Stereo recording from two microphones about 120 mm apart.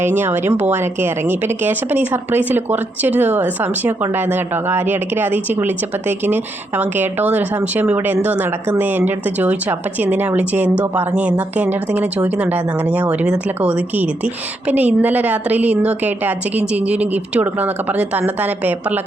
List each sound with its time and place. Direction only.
0.0 s speech: 20° right (ahead or behind)